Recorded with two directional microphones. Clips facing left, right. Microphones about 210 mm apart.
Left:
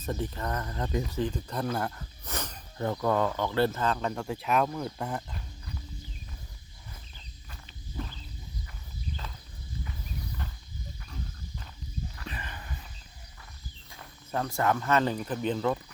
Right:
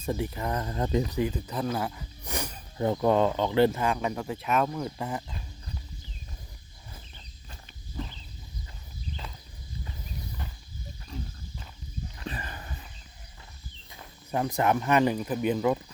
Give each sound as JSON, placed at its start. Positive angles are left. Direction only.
{"t": 0.0, "sound": "speech", "side_deg": -10}
{"t": 1.2, "sound": "speech", "side_deg": -5}
{"t": 12.3, "sound": "a sound", "side_deg": -35}
{"t": 14.0, "sound": "speech", "side_deg": -15}